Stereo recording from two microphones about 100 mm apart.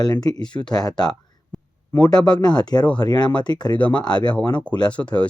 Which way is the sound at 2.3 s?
45° left (ahead or behind).